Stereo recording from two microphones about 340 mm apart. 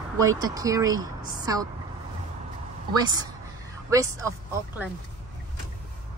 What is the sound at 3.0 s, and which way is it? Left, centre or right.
Speech, centre.